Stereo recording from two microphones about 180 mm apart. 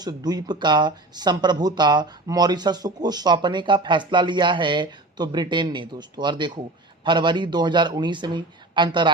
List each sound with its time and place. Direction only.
0.0 s speech: 20° right (ahead or behind)